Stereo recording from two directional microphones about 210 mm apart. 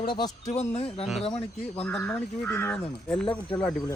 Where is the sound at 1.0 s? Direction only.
Centre (ahead or behind).